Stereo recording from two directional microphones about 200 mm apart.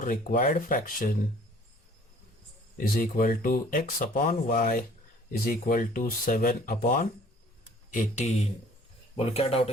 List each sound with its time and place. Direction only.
0.0 s speech: 40° left (ahead or behind)
2.7 s speech: 45° left (ahead or behind); by 9.6 s 30° left (ahead or behind)